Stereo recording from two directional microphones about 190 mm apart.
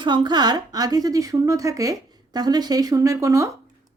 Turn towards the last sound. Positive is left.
turn(degrees=-15)  # may be behind; listen again after turning